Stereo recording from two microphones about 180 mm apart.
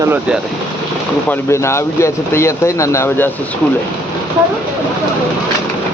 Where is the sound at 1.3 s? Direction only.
15° left (ahead or behind).